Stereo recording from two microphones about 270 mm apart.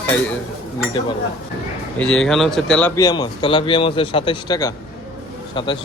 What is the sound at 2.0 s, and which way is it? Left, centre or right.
Speech, centre.